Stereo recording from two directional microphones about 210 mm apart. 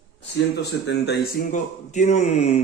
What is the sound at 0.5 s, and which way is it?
Speech, 55° left (ahead or behind).